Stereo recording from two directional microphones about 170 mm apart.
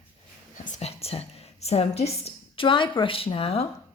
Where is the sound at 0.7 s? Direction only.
40° left (ahead or behind).